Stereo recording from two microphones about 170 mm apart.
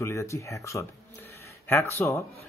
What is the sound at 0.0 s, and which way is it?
A man's voice, 15° left (ahead or behind).